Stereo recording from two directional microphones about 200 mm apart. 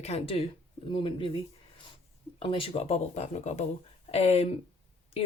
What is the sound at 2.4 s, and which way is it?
Speech, 25° left (ahead or behind).